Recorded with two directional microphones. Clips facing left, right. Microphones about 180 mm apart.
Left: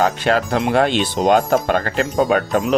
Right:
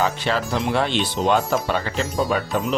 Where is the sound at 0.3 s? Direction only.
50° left (ahead or behind).